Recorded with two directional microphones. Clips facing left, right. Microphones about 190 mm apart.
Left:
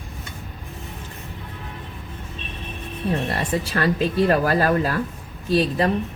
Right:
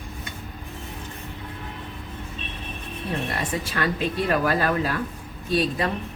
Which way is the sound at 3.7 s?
40° left (ahead or behind).